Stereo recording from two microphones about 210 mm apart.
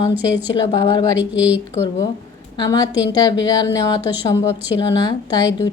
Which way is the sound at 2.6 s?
20° left (ahead or behind).